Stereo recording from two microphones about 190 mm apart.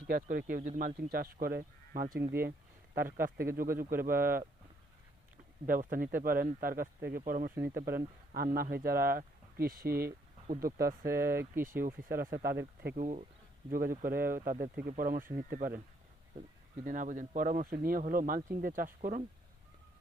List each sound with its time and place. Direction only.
0.1 s speech: 45° right (ahead or behind)
2.9 s speech: 10° right (ahead or behind)
3.2 s speech: 50° right (ahead or behind)
5.6 s speech: 50° right (ahead or behind)
7.5 s speech: 10° right (ahead or behind)
8.5 s speech: 50° right (ahead or behind)
11.0 s speech: 15° right (ahead or behind)
12.1 s speech: 50° right (ahead or behind)
13.0 s speech: 40° right (ahead or behind)
16.8 s speech: 45° right (ahead or behind)